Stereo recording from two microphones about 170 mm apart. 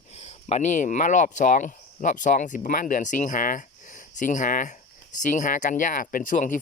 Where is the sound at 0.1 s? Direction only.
40° left (ahead or behind).